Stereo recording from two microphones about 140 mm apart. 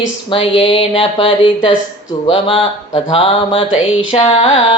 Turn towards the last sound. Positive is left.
turn(degrees=40)  # may be behind; listen again after turning